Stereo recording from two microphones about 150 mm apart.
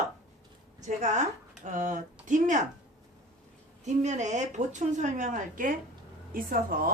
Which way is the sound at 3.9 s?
50° right (ahead or behind).